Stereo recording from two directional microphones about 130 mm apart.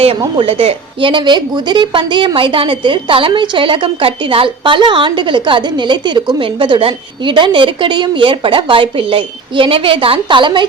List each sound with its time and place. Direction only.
0.4 s a woman's voice: 50° right (ahead or behind)